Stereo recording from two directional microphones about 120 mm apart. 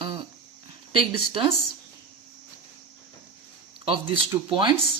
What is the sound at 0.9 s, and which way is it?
Speech, 45° right (ahead or behind).